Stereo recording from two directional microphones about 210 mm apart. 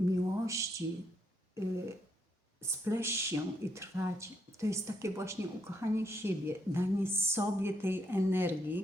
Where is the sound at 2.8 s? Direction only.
10° right (ahead or behind).